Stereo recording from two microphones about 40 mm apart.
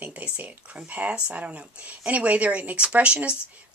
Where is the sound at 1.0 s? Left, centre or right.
Right.